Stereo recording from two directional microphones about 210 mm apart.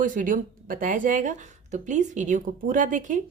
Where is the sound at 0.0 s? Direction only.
40° right (ahead or behind).